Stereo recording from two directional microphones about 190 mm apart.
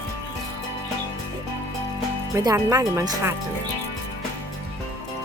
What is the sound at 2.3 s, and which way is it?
Speech, 15° right (ahead or behind).